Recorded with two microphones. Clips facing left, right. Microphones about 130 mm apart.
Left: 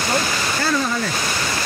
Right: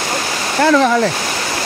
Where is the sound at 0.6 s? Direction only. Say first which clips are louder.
Right 11 dB; 85° right.